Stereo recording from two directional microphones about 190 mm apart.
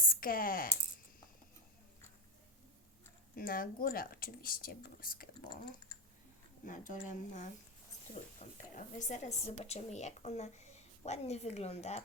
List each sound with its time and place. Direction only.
0.1 s speech: 50° left (ahead or behind)
3.3 s speech: 50° left (ahead or behind)
6.7 s speech: 45° left (ahead or behind)